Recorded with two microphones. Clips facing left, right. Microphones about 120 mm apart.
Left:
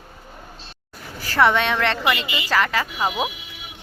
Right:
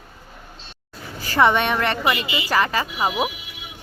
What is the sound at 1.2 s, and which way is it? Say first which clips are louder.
A woman's voice: even; 15° right (ahead or behind).